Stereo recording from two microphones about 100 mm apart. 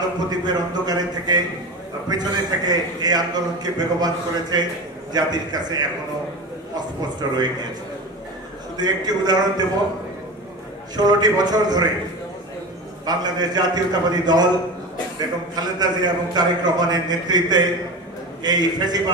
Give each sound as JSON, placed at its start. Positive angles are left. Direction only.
{"t": 0.3, "sound": "a man's voice", "side_deg": -40}
{"t": 8.7, "sound": "a man's voice", "side_deg": -45}
{"t": 11.0, "sound": "a man's voice", "side_deg": -40}
{"t": 13.0, "sound": "a man's voice", "side_deg": -45}